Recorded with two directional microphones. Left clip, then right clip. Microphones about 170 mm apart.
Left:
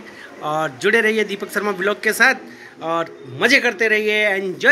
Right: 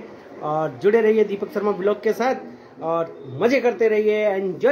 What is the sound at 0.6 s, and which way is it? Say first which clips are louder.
Speech: left 1 dB; 5° right (ahead or behind).